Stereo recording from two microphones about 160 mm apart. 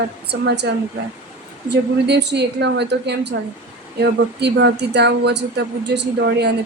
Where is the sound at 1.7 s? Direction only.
90° right.